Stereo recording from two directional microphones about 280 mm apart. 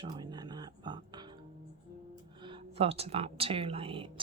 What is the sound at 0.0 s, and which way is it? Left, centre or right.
Music, centre.